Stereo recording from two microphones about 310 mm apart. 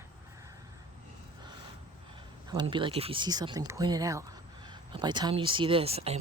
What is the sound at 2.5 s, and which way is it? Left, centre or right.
Speech, centre.